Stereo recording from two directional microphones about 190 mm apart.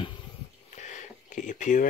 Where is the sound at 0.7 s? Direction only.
40° left (ahead or behind).